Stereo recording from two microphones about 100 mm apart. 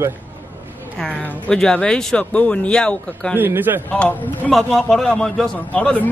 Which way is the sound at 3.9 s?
15° left (ahead or behind).